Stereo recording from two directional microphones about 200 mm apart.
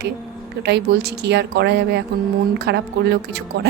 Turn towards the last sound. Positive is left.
turn(degrees=-55)  # may be behind; listen again after turning